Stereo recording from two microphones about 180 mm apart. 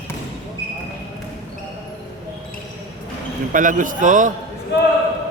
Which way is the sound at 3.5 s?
45° right (ahead or behind).